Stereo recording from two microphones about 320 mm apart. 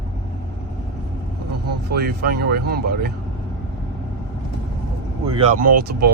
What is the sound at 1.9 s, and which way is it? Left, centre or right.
Speech, right.